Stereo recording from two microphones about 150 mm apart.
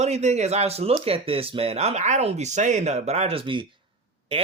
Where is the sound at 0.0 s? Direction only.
50° right (ahead or behind).